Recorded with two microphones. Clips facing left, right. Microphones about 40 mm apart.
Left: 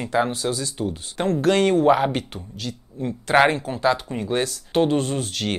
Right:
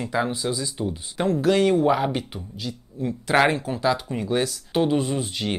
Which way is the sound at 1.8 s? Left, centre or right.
Left.